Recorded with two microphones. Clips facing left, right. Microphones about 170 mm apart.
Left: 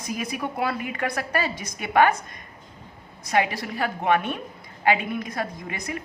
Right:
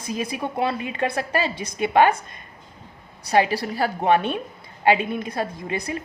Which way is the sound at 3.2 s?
35° right (ahead or behind).